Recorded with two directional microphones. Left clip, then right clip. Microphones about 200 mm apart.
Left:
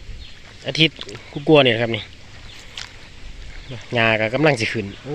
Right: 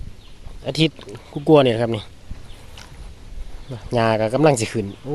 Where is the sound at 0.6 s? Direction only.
20° right (ahead or behind).